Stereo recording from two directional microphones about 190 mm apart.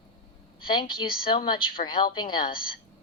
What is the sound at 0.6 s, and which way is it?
Speech, 25° left (ahead or behind).